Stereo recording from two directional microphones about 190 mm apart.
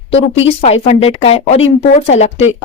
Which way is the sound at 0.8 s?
30° left (ahead or behind).